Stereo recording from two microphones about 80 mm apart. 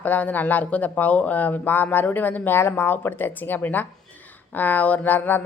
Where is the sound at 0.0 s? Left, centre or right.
Left.